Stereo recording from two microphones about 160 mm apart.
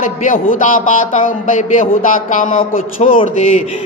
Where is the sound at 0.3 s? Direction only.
55° left (ahead or behind).